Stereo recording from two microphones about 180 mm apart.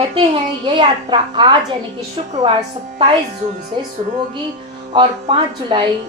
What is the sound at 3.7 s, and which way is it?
Speech, 25° right (ahead or behind).